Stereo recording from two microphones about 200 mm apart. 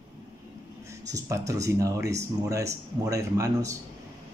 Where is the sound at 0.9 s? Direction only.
15° right (ahead or behind).